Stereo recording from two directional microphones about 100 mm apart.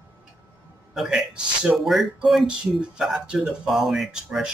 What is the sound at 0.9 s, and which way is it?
Speech, 10° right (ahead or behind).